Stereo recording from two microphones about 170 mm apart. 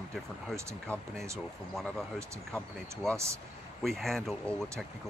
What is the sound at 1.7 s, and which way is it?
Speech, 5° left (ahead or behind).